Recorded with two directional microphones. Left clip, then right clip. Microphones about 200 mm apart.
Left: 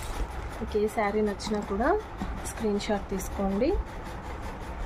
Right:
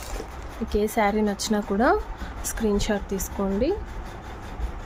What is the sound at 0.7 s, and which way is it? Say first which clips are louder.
A woman's voice: right 4 dB; 60° right (ahead or behind).